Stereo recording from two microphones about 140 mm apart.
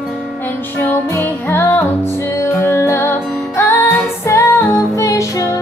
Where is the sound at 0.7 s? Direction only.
15° left (ahead or behind).